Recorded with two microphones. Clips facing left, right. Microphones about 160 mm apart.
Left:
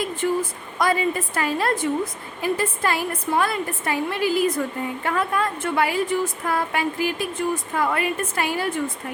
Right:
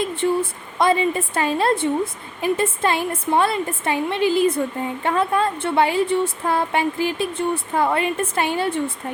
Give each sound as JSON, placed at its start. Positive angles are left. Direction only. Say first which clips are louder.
{"t": 0.2, "sound": "a woman's voice", "louder": "right 2 dB", "side_deg": -25}